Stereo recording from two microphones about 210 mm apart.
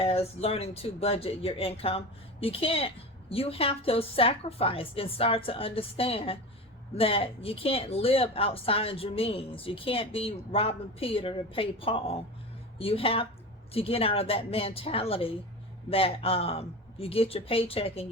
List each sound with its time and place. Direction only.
0.0 s speech: 30° left (ahead or behind)